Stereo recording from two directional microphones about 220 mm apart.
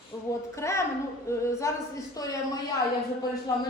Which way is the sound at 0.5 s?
15° left (ahead or behind).